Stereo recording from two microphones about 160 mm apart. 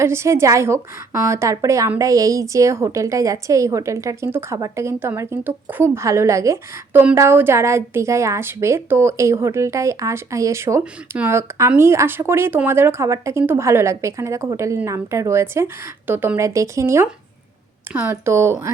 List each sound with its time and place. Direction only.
0.0 s a woman's voice: 15° right (ahead or behind)